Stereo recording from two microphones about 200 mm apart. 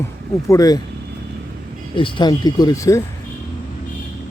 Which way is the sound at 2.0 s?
25° left (ahead or behind).